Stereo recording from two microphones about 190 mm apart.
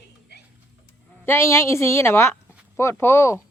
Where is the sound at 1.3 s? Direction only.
15° left (ahead or behind).